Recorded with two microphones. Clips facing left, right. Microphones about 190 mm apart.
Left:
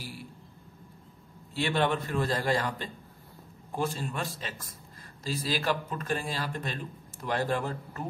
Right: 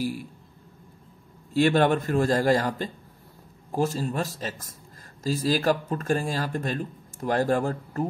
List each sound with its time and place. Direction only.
1.5 s a man's voice: 45° right (ahead or behind)